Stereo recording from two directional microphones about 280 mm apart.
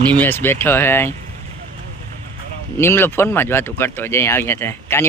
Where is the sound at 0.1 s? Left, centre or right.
Centre.